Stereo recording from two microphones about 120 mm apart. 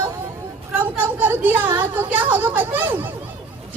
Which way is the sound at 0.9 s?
15° right (ahead or behind).